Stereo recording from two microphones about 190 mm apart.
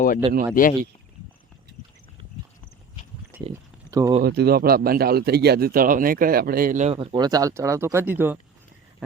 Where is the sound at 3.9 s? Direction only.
20° right (ahead or behind).